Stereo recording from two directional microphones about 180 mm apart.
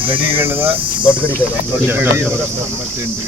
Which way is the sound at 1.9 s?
10° right (ahead or behind).